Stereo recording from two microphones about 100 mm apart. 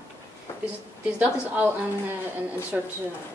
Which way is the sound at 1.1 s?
15° right (ahead or behind).